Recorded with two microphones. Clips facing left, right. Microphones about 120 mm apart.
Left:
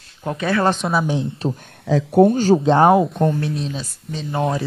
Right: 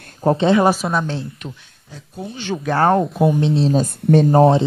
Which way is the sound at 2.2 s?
40° left (ahead or behind).